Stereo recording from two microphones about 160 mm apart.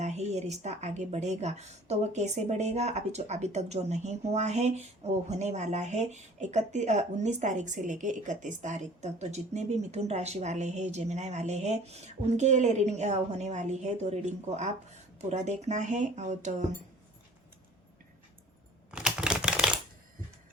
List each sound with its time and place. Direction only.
0.0 s a woman's voice: 45° right (ahead or behind)
18.9 s typewriter: 5° right (ahead or behind)